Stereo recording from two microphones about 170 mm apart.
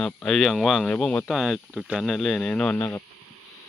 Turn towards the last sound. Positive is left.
turn(degrees=15)  # may be behind; listen again after turning